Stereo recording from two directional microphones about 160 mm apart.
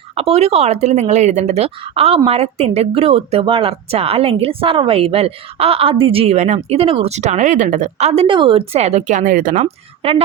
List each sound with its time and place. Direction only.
0.2 s speech: 40° right (ahead or behind); by 9.6 s 55° right (ahead or behind)
9.6 s speech: 35° right (ahead or behind)